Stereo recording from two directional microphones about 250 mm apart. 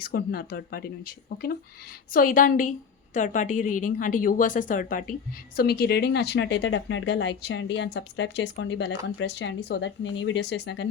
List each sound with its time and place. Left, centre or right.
0.0 s a woman's voice: left